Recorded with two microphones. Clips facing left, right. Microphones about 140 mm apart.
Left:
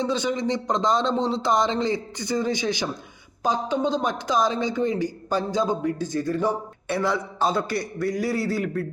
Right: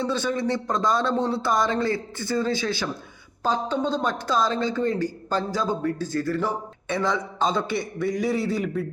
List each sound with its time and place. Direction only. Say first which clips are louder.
0.0 s speech: left 1 dB; 15° left (ahead or behind); by 8.9 s centre (ahead or behind)